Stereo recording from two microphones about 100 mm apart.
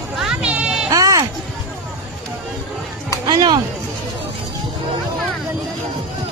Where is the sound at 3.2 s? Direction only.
45° right (ahead or behind).